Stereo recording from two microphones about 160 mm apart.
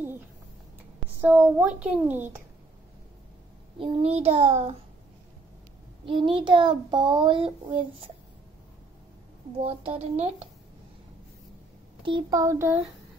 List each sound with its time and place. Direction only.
1.2 s a woman's voice: 10° right (ahead or behind)
3.7 s a child's voice: 35° right (ahead or behind)
6.0 s a child's voice: 35° right (ahead or behind)
9.6 s a child's voice: 40° right (ahead or behind)
12.0 s child singing: 30° right (ahead or behind); by 12.8 s 15° right (ahead or behind)